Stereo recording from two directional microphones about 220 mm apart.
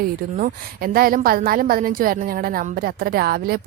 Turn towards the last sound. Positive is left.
turn(degrees=-45)  # may be behind; listen again after turning